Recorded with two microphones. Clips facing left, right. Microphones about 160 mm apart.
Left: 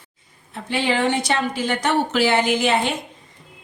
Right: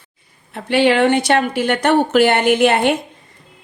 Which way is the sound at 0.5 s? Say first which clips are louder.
Right 8 dB; 65° right (ahead or behind).